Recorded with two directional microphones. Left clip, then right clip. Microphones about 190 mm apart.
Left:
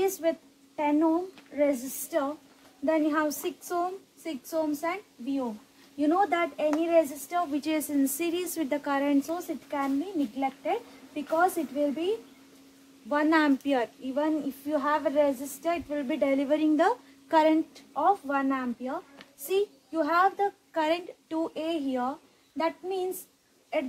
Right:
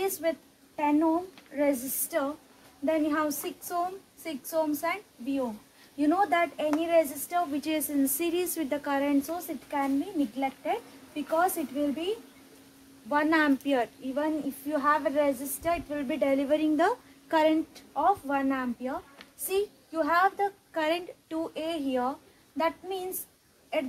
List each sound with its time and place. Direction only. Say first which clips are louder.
0.0 s a child's voice: left 2 dB; 15° left (ahead or behind)
13.1 s a woman's voice: left 1 dB; 20° left (ahead or behind)